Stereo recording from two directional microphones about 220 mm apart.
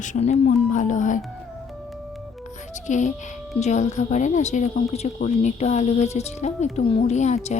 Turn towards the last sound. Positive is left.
turn(degrees=30)  # may be behind; listen again after turning